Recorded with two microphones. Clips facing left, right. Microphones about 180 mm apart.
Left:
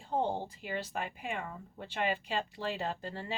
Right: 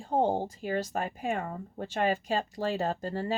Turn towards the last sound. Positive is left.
turn(degrees=-40)  # may be behind; listen again after turning